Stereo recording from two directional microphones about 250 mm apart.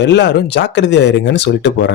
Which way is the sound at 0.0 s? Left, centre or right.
Left.